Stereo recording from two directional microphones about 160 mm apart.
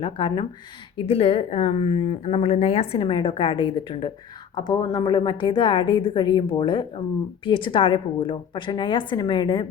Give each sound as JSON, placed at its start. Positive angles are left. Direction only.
{"t": 0.0, "sound": "a woman's voice", "side_deg": 30}